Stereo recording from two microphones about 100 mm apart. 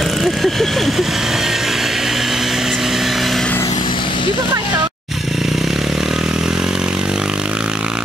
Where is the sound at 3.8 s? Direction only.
55° left (ahead or behind).